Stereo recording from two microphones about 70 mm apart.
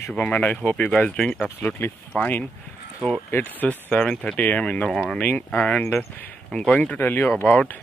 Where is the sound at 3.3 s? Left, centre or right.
Left.